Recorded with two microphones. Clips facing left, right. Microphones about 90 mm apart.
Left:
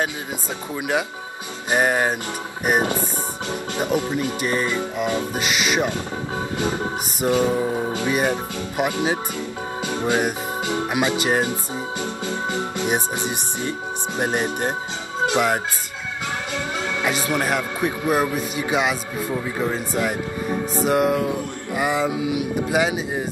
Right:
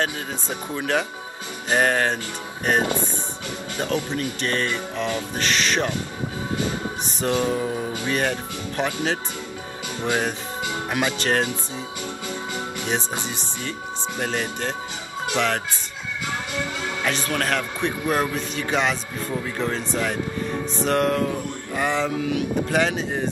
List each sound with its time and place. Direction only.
0.7 s speech: 10° left (ahead or behind)
7.2 s speech: 20° left (ahead or behind)
9.9 s speech: 20° left (ahead or behind)
12.5 s speech: 20° left (ahead or behind)
17.0 s speech: 15° left (ahead or behind)